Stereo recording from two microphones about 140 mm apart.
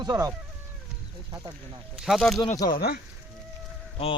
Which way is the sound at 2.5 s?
25° left (ahead or behind).